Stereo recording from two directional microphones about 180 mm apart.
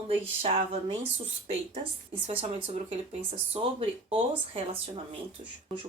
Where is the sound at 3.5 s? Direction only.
30° right (ahead or behind).